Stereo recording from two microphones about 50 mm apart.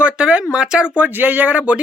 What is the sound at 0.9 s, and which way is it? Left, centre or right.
Speech, right.